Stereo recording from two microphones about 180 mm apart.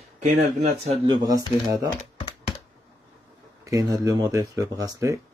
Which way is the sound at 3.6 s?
20° right (ahead or behind).